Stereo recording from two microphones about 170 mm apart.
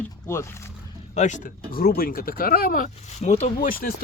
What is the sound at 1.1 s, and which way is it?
Speech, 45° left (ahead or behind).